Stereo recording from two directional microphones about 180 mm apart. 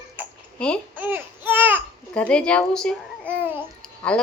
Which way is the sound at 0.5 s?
5° left (ahead or behind).